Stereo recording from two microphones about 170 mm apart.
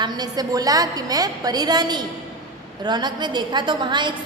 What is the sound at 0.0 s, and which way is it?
A woman's voice, 25° right (ahead or behind).